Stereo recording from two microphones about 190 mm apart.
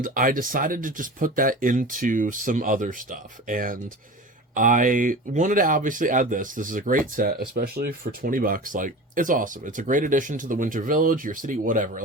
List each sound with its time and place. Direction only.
0.0 s speech: 50° right (ahead or behind)